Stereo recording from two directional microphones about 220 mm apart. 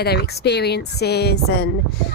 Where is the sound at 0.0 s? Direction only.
45° left (ahead or behind).